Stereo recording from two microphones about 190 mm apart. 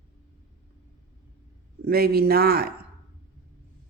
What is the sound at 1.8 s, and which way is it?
Speech, 55° right (ahead or behind).